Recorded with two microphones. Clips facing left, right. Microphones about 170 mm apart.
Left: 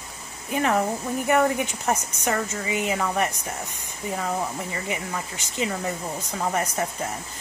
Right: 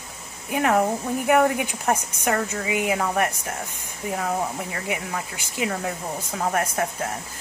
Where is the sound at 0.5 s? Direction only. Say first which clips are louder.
Right 2 dB; 10° right (ahead or behind).